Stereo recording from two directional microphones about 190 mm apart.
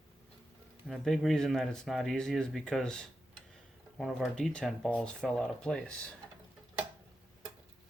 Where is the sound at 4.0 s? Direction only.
Centre (ahead or behind).